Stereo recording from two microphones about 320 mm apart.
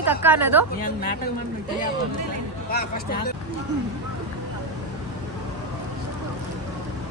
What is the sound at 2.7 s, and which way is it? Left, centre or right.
Speech, left.